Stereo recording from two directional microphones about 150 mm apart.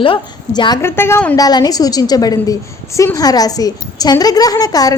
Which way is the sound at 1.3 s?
25° left (ahead or behind).